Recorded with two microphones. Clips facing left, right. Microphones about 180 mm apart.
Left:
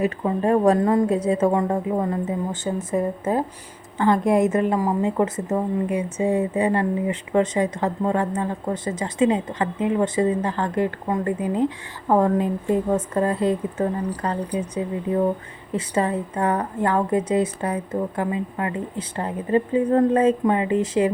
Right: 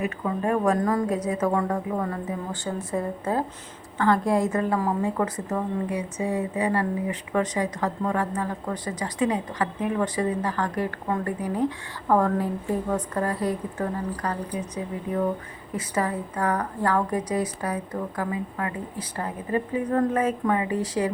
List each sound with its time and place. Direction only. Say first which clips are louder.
0.0 s a woman's voice: left 5 dB; 30° left (ahead or behind)
15.7 s a woman's voice: left 4 dB; 25° left (ahead or behind)